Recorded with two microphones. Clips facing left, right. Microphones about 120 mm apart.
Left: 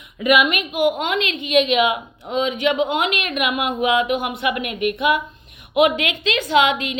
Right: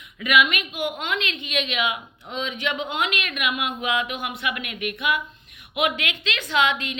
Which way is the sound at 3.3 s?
45° left (ahead or behind).